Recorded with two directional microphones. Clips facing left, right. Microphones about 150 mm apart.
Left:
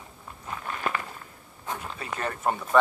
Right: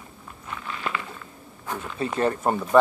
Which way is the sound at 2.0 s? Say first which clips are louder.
Right 10 dB; 30° right (ahead or behind).